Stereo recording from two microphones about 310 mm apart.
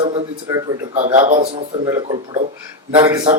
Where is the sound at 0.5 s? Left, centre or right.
Centre.